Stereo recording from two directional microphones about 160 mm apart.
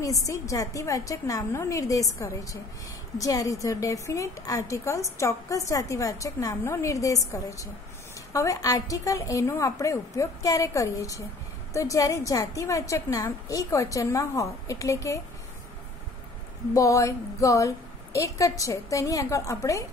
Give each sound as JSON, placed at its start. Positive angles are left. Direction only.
{"t": 0.0, "sound": "a woman's voice", "side_deg": 20}
{"t": 16.7, "sound": "a woman's voice", "side_deg": 20}